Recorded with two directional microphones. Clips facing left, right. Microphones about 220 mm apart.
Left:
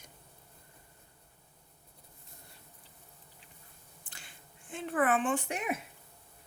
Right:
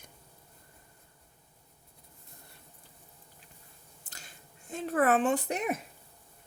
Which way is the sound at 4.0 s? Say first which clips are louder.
Right 2 dB; 40° right (ahead or behind).